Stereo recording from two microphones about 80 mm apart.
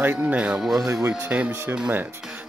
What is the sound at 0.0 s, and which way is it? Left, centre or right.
Speech, right.